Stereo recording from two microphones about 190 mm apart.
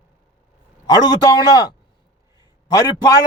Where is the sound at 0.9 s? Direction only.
20° left (ahead or behind).